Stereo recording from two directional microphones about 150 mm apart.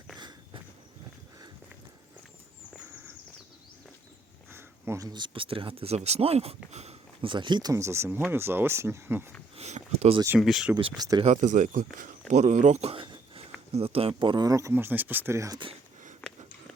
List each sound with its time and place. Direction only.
0.2 s walk: 30° right (ahead or behind)
4.5 s speech: 20° right (ahead or behind)
9.6 s a sound: 50° right (ahead or behind)
10.4 s speech: 5° right (ahead or behind)
10.8 s speech: 30° right (ahead or behind)
11.3 s speech: 55° right (ahead or behind)
12.3 s a sound: 50° right (ahead or behind)
13.7 s speech: 40° right (ahead or behind); by 15.5 s 20° right (ahead or behind)
15.5 s speech: 35° right (ahead or behind)
16.2 s a sound: 5° left (ahead or behind)